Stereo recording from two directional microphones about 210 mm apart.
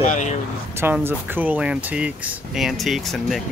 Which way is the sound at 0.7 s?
10° right (ahead or behind).